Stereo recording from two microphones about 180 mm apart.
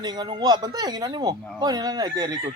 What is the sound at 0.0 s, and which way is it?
Speech, 25° right (ahead or behind).